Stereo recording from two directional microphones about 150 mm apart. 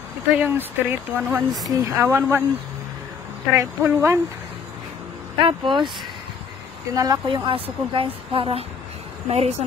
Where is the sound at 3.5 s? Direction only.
20° right (ahead or behind).